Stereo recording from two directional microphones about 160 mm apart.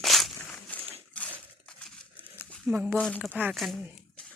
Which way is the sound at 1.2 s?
10° left (ahead or behind).